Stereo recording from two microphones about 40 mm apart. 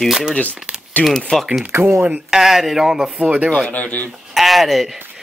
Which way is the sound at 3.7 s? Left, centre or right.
Left.